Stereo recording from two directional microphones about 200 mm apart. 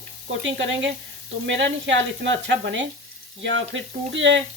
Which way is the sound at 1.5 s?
65° right (ahead or behind).